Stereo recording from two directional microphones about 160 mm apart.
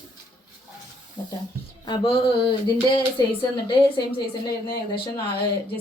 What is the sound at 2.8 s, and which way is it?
Speech, 30° left (ahead or behind).